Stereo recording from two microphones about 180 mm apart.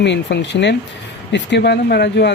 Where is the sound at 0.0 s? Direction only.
75° left (ahead or behind).